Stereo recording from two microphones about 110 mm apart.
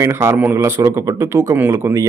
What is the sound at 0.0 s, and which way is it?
A man's voice, 25° right (ahead or behind).